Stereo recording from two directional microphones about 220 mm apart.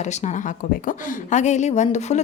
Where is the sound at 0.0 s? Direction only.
30° left (ahead or behind).